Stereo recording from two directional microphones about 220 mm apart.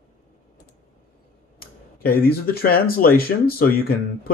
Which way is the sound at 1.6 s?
40° left (ahead or behind).